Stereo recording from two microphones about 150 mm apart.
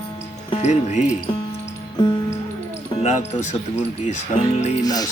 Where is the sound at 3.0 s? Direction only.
45° left (ahead or behind).